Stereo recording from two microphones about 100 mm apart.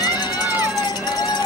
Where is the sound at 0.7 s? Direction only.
40° left (ahead or behind).